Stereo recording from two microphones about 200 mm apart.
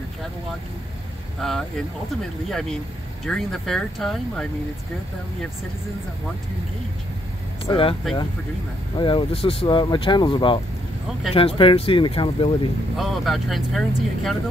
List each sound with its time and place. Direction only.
1.4 s speech: centre (ahead or behind)
3.3 s speech: centre (ahead or behind)
7.6 s speech: 25° left (ahead or behind)
8.9 s speech: 25° left (ahead or behind)
12.9 s speech: centre (ahead or behind)